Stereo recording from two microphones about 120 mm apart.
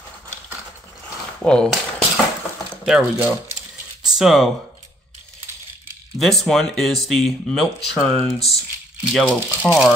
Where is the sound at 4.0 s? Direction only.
5° right (ahead or behind).